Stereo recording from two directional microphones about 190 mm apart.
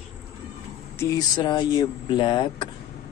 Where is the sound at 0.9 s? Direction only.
20° left (ahead or behind).